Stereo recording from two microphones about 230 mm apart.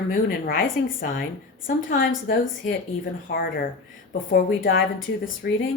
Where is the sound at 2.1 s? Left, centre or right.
Left.